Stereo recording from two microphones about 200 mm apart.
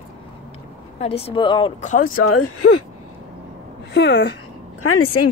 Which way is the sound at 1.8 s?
40° left (ahead or behind).